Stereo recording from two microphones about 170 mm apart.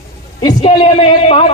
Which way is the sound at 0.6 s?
30° left (ahead or behind).